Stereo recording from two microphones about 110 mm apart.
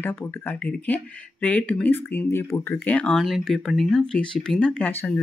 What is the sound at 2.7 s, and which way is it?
Speech, 10° left (ahead or behind).